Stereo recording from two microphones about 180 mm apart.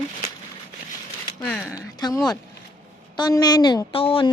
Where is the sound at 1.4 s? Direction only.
10° left (ahead or behind).